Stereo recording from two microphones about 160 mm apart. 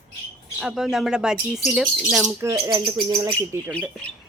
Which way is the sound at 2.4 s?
20° right (ahead or behind).